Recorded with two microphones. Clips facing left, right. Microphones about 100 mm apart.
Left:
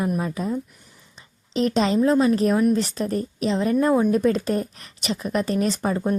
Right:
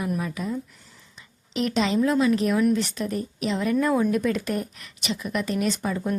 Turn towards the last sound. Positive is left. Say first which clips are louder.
# left 3 dB
turn(degrees=40)  # may be behind; listen again after turning